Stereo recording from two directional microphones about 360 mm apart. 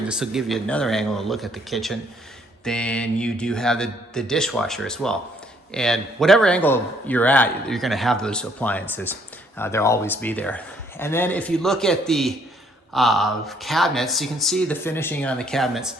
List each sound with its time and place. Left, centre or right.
0.1 s a man's voice: centre